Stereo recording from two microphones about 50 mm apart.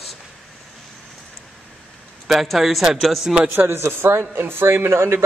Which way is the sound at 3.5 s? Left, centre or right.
Right.